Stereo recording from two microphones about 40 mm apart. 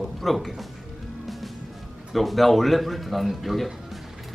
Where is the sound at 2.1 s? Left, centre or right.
Centre.